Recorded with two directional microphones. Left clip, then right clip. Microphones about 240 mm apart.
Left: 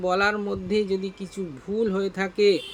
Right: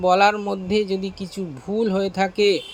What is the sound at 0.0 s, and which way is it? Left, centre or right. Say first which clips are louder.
Speech: right 6 dB; centre.